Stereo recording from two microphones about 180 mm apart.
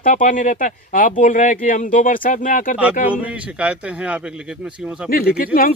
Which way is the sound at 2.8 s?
10° right (ahead or behind).